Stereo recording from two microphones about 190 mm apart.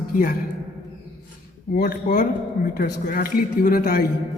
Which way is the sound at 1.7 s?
55° left (ahead or behind).